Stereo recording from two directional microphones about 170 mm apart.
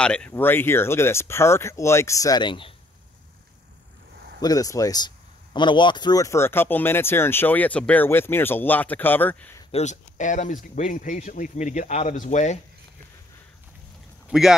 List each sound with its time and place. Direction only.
0.0 s speech: 5° left (ahead or behind); by 2.7 s 30° left (ahead or behind)
4.4 s speech: 20° left (ahead or behind)
9.7 s speech: 40° left (ahead or behind)
14.3 s speech: 5° right (ahead or behind)